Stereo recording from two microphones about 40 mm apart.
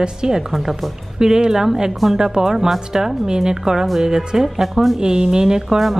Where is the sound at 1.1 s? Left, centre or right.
Centre.